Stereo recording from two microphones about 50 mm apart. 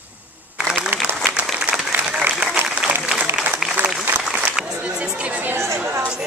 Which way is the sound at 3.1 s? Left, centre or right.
Right.